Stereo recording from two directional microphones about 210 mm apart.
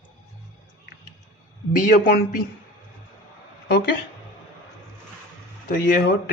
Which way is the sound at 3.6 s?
50° left (ahead or behind).